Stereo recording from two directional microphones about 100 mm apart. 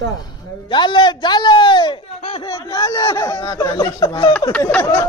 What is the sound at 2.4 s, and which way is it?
Speech, 35° left (ahead or behind).